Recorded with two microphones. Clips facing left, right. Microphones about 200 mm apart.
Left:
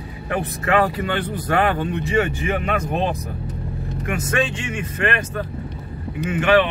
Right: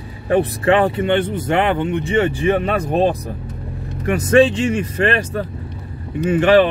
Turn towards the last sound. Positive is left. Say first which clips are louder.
# right 5 dB
turn(degrees=-35)  # may be behind; listen again after turning